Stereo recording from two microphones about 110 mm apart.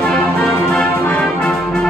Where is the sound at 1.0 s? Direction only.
20° left (ahead or behind).